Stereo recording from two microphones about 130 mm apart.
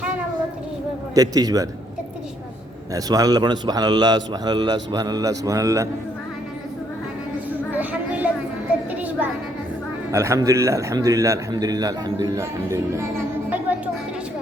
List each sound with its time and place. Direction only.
1.1 s a man's voice: 30° right (ahead or behind)
2.9 s a man's voice: 30° right (ahead or behind)
7.7 s a sound: 15° right (ahead or behind)
10.1 s a man's voice: 25° right (ahead or behind)